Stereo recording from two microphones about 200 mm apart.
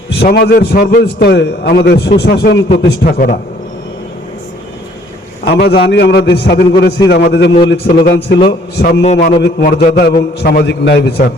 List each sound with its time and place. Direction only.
0.1 s a man's voice: 55° left (ahead or behind)
5.5 s a man's voice: 55° left (ahead or behind)
7.9 s a man's voice: 40° left (ahead or behind)
8.4 s a man's voice: 50° left (ahead or behind)
9.0 s a man's voice: 30° left (ahead or behind)
9.4 s a man's voice: 55° left (ahead or behind)